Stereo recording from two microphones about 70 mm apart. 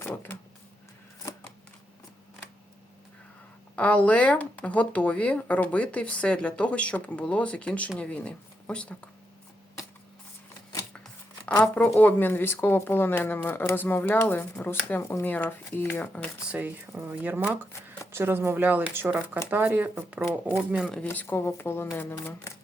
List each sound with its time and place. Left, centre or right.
0.0 s vehicle: left
3.8 s speech: left
11.6 s speech: left
16.5 s speech: centre
21.0 s speech: left
21.2 s speech: left